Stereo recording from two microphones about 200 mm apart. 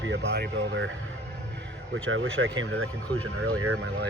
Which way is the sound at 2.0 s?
75° right (ahead or behind).